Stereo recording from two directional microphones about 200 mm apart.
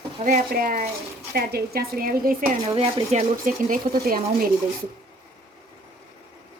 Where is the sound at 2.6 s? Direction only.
30° right (ahead or behind); by 4.4 s 45° right (ahead or behind).